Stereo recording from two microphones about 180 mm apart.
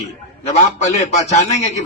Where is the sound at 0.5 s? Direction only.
40° left (ahead or behind).